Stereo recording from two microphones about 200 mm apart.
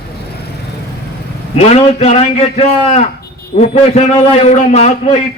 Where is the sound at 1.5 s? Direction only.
30° left (ahead or behind).